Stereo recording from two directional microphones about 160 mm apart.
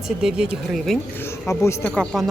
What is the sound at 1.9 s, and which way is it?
Speech, 5° left (ahead or behind).